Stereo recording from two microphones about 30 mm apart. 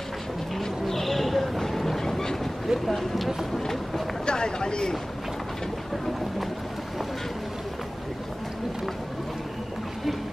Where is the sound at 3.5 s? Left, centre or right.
Centre.